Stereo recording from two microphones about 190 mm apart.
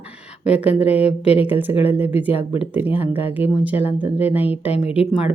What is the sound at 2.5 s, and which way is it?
Speech, 10° right (ahead or behind).